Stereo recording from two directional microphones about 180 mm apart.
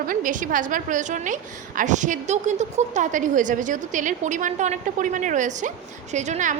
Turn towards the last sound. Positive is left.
turn(degrees=-40)  # may be behind; listen again after turning